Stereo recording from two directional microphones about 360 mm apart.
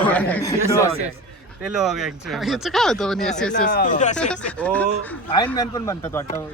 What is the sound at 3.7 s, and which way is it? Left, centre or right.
Speech, left.